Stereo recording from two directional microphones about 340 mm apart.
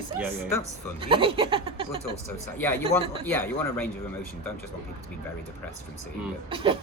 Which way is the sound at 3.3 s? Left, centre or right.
Centre.